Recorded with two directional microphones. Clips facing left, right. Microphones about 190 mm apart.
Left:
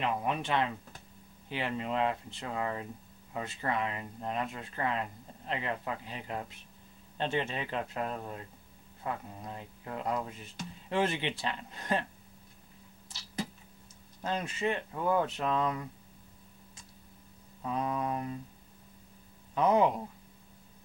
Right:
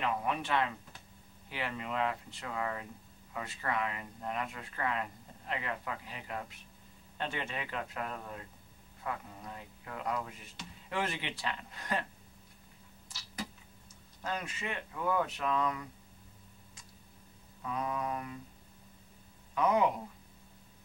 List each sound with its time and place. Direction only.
0.0 s speech: 25° left (ahead or behind)
14.2 s speech: 25° left (ahead or behind)
17.6 s mantra: 30° left (ahead or behind)
19.5 s speech: 30° left (ahead or behind)